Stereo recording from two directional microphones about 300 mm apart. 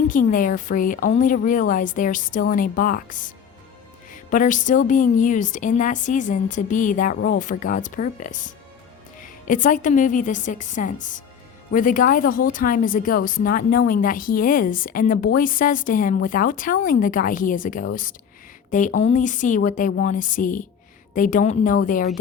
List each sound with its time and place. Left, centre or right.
0.1 s speech: left